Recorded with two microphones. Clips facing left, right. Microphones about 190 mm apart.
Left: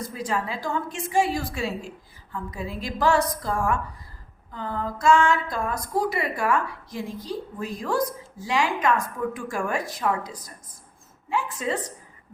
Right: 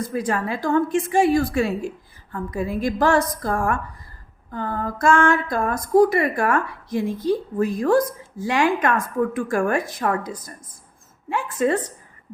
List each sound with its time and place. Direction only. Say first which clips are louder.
0.1 s a woman's voice: right 5 dB; 55° right (ahead or behind)